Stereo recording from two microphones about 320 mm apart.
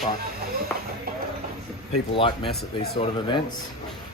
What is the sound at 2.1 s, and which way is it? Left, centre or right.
Speech, centre.